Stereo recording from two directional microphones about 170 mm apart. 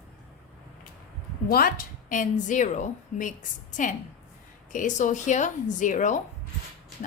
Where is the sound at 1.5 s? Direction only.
60° left (ahead or behind).